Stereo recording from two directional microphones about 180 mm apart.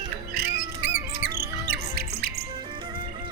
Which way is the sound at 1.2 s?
60° right (ahead or behind).